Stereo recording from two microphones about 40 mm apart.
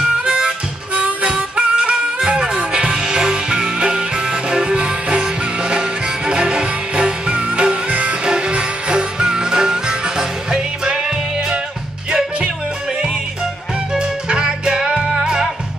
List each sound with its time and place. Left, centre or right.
0.2 s harmonica: right
1.0 s music: centre
7.9 s music: right
8.3 s music: right
13.9 s music: right